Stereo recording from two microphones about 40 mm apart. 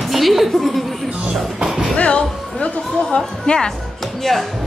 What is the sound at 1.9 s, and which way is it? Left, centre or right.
Speech, left.